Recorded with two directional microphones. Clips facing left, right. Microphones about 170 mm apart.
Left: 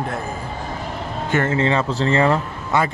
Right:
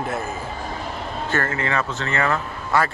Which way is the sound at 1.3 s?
20° left (ahead or behind).